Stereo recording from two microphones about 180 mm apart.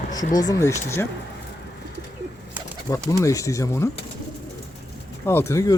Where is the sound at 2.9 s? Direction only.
25° left (ahead or behind).